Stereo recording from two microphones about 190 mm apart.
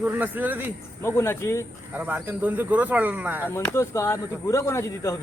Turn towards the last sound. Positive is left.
turn(degrees=15)  # may be behind; listen again after turning